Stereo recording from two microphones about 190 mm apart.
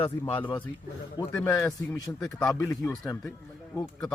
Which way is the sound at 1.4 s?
15° left (ahead or behind).